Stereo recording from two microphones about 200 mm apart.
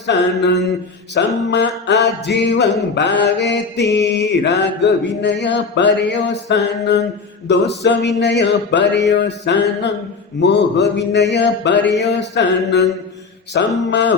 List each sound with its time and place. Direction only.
0.1 s mantra: 60° left (ahead or behind)